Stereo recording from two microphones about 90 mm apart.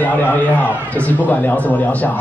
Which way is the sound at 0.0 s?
20° left (ahead or behind).